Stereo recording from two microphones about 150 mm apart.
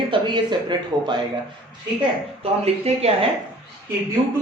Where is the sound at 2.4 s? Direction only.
45° right (ahead or behind).